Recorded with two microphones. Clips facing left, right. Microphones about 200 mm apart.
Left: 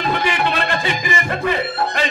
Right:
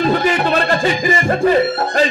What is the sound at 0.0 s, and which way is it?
Music, 40° right (ahead or behind).